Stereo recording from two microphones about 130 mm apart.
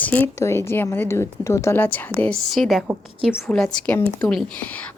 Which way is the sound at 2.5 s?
Centre (ahead or behind).